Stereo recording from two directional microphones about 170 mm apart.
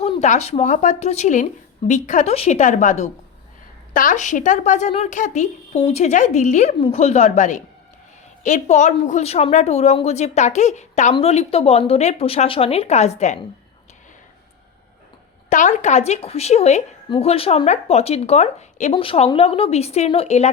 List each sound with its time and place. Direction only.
0.0 s a woman's voice: 40° left (ahead or behind)
15.4 s a woman's voice: 45° left (ahead or behind)